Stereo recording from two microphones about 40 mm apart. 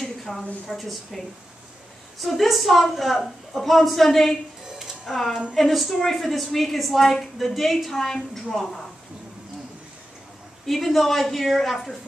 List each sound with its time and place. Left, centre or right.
0.0 s a sound: centre
0.7 s a woman's voice: centre
2.2 s a woman's voice: centre
4.7 s music: centre
5.1 s a woman's voice: centre
10.6 s a woman's voice: centre